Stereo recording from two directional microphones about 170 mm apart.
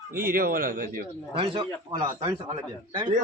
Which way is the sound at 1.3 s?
35° right (ahead or behind).